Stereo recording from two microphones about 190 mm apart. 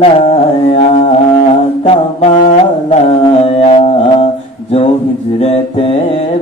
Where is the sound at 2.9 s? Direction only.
30° left (ahead or behind).